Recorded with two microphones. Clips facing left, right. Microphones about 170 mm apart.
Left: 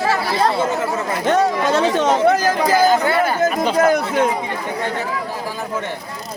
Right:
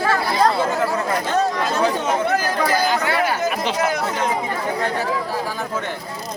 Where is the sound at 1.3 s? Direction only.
75° left (ahead or behind).